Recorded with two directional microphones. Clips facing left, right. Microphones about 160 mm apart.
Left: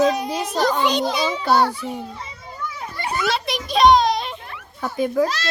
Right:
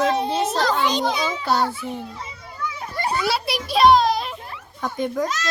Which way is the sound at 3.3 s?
5° right (ahead or behind).